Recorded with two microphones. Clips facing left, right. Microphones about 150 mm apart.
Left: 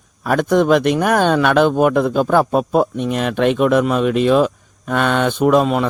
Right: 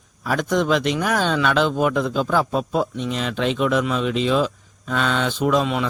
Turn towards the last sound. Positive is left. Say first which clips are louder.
# left 6 dB
turn(degrees=50)  # may be behind; listen again after turning